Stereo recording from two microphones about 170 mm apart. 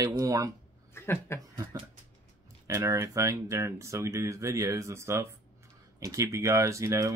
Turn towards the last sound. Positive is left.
turn(degrees=-20)  # may be behind; listen again after turning